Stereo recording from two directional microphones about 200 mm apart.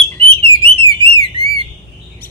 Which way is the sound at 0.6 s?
25° right (ahead or behind).